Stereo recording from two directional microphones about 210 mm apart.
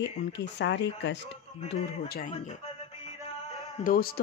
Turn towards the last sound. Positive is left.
turn(degrees=45)  # may be behind; listen again after turning